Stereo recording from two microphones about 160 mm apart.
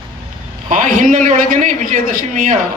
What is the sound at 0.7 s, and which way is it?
A man's voice, 50° right (ahead or behind).